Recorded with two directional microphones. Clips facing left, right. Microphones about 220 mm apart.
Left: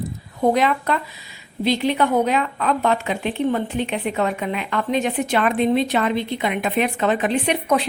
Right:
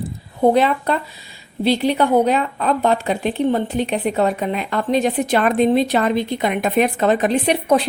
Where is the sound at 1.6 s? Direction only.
35° right (ahead or behind).